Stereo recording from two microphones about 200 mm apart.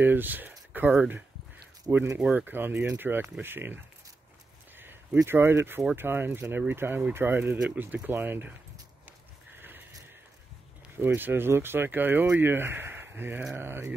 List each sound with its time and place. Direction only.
0.0 s speech: 10° right (ahead or behind)
11.0 s speech: 10° right (ahead or behind)